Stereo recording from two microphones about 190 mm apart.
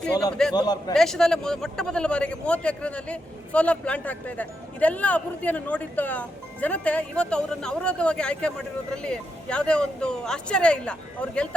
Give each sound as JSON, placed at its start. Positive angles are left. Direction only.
{"t": 0.5, "sound": "a man's voice", "side_deg": 20}
{"t": 0.9, "sound": "a man's voice", "side_deg": 0}